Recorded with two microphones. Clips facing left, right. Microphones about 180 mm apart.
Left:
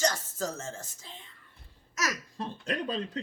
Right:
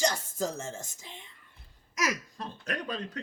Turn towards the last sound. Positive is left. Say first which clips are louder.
# left 3 dB
turn(degrees=30)  # may be behind; listen again after turning